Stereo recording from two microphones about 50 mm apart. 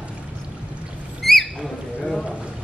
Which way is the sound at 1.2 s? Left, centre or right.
Centre.